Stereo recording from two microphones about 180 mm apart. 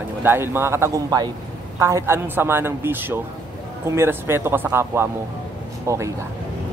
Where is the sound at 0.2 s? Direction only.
10° right (ahead or behind).